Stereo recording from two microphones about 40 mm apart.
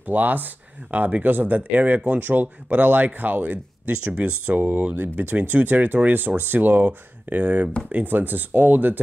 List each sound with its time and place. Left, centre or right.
0.0 s speech: right